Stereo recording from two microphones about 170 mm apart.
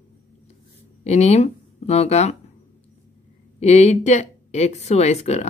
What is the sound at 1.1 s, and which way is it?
Speech, 40° left (ahead or behind).